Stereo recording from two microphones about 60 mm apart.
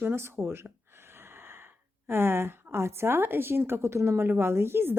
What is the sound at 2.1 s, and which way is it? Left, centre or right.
A woman's voice, right.